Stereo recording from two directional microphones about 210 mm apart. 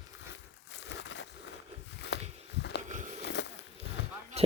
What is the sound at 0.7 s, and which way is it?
Crushing, 60° left (ahead or behind).